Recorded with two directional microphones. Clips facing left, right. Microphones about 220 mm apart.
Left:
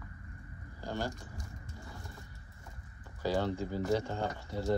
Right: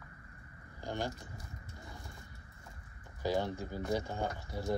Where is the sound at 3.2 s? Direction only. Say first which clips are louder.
Left 2 dB; 15° right (ahead or behind).